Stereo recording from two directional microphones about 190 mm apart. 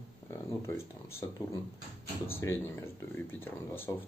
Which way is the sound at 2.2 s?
10° left (ahead or behind).